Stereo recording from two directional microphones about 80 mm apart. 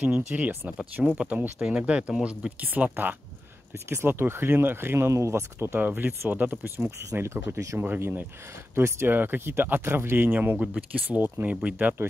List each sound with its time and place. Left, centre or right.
0.0 s speech: centre
7.0 s speech: right
11.5 s speech: centre